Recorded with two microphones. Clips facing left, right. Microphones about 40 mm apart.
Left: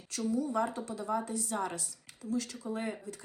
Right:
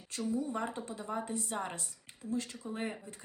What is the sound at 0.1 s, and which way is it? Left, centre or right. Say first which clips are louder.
Speech: left 3 dB; right.